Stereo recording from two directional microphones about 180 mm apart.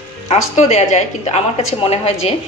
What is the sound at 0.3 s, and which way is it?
A woman's voice, 35° left (ahead or behind).